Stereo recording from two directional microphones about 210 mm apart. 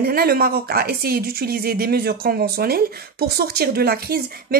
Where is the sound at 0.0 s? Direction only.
45° right (ahead or behind).